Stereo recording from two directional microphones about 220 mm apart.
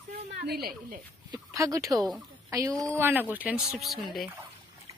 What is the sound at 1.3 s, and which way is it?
Speech, 15° right (ahead or behind).